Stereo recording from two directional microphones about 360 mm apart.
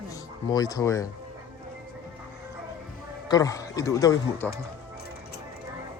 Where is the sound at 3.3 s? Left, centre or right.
Centre.